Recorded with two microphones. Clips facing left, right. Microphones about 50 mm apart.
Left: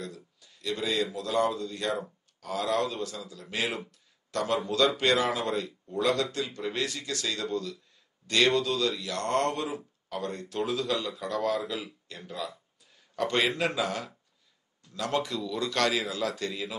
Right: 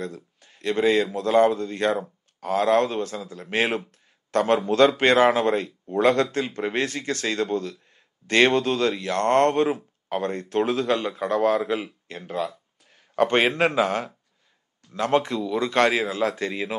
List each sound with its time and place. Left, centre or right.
0.0 s speech: right